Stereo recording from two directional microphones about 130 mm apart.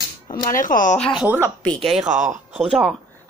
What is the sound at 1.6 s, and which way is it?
Speech, 10° left (ahead or behind).